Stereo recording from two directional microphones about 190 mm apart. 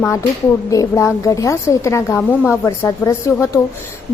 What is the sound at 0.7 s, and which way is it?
A woman's voice, 15° left (ahead or behind).